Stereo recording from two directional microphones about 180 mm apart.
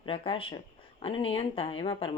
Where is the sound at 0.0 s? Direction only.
30° left (ahead or behind).